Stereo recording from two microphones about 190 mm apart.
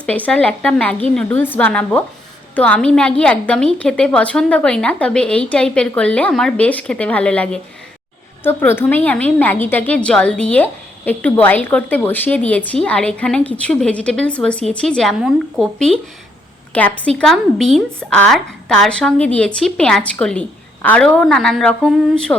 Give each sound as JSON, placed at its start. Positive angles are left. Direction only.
{"t": 0.0, "sound": "a woman's voice", "side_deg": 5}